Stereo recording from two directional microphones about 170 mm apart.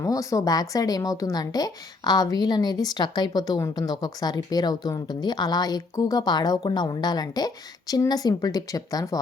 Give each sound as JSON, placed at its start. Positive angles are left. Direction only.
{"t": 0.0, "sound": "speech", "side_deg": 20}